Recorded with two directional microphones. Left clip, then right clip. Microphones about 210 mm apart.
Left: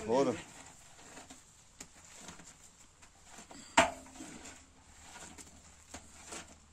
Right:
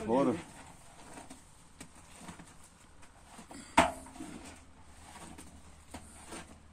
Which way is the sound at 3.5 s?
Centre (ahead or behind).